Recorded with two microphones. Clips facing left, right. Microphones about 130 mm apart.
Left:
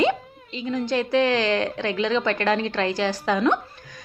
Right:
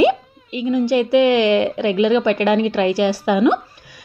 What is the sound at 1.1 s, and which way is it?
A woman's voice, 15° right (ahead or behind).